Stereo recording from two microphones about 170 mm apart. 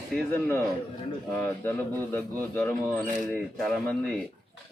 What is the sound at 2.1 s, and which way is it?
A man's voice, 10° left (ahead or behind).